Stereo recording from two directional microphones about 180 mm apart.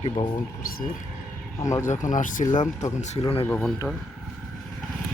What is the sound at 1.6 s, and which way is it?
Speech, 45° left (ahead or behind).